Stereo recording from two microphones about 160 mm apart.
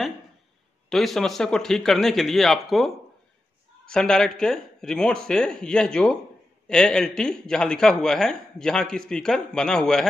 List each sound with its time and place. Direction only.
0.8 s speech: centre (ahead or behind)
3.9 s speech: 5° left (ahead or behind)